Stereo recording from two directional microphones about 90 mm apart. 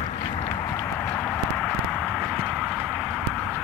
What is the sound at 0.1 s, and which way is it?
Clip-clop, 80° left.